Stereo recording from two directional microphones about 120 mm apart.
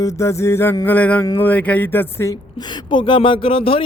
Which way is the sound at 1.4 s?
15° left (ahead or behind).